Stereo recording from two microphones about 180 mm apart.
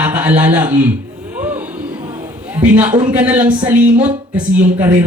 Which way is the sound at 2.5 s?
10° right (ahead or behind).